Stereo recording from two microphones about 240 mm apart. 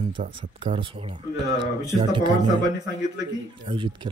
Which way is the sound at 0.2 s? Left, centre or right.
Right.